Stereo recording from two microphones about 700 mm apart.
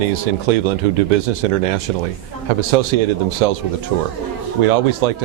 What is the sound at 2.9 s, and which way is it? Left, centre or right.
Speech, right.